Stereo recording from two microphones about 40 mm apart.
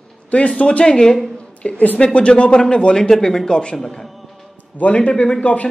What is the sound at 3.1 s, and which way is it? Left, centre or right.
Speech, centre.